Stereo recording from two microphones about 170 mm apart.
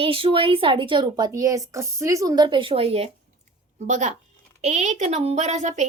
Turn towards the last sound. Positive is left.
turn(degrees=-45)  # may be behind; listen again after turning